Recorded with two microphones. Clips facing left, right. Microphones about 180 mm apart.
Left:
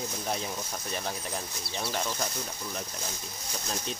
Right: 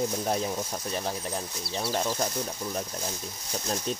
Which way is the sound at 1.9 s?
30° right (ahead or behind).